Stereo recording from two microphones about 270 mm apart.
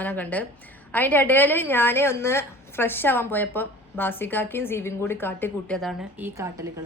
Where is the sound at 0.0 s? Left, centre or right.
Centre.